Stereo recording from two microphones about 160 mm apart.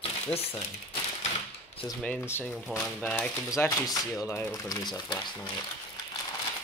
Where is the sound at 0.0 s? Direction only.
40° left (ahead or behind).